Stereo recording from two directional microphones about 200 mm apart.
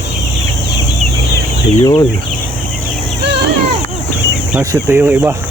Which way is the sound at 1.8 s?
20° left (ahead or behind).